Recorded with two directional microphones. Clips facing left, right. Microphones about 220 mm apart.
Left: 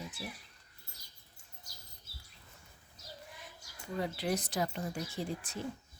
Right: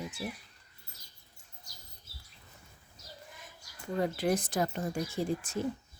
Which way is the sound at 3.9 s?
50° right (ahead or behind).